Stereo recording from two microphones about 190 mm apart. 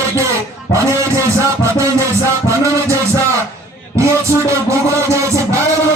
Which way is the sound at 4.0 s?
15° right (ahead or behind).